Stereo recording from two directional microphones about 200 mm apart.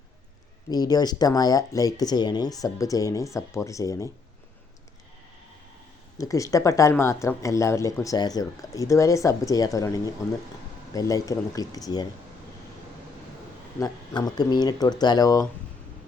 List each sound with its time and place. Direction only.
0.7 s speech: 20° left (ahead or behind)
6.1 s speech: 15° left (ahead or behind)
13.7 s speech: 20° left (ahead or behind)